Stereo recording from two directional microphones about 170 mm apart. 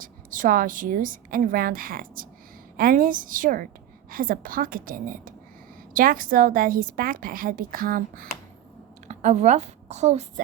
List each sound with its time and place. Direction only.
0.0 s a woman's voice: 50° right (ahead or behind)
9.0 s a woman's voice: 40° right (ahead or behind)